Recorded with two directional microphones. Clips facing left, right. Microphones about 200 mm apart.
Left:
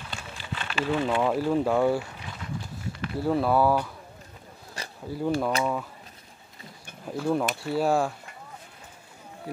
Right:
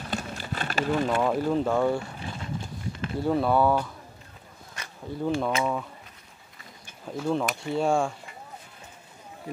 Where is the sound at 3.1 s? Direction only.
Centre (ahead or behind).